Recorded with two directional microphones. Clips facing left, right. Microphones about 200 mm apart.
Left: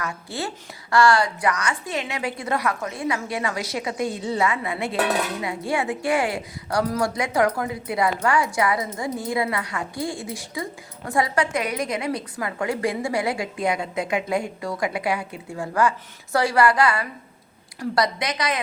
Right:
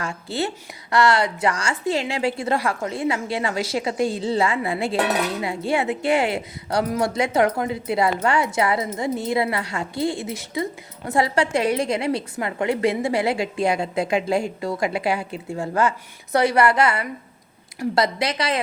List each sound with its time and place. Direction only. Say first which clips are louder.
0.0 s a woman's voice: right 4 dB; 25° right (ahead or behind)